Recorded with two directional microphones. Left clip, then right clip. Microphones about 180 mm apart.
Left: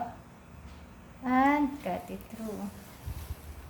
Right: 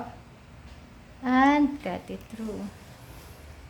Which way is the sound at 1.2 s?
35° right (ahead or behind).